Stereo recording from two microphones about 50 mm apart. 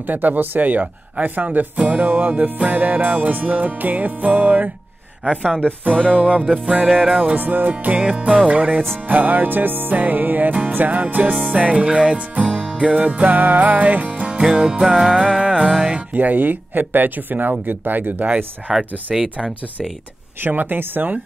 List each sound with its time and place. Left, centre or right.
0.0 s speech: right
5.2 s music: right
5.6 s speech: right
6.6 s music: right
7.2 s speech: right
8.5 s music: right
9.0 s speech: right
11.5 s music: right
16.1 s speech: right
18.7 s music: centre
19.1 s speech: centre
20.4 s speech: right